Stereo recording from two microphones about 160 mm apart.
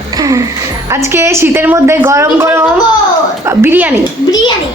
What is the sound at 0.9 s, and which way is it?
A woman's voice, 15° right (ahead or behind).